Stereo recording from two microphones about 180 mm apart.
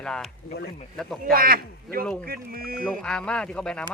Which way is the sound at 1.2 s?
55° right (ahead or behind).